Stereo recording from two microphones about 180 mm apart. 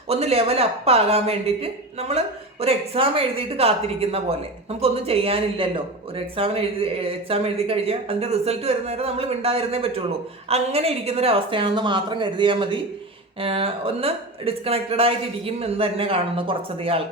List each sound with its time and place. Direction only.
0.1 s a woman's voice: 35° right (ahead or behind)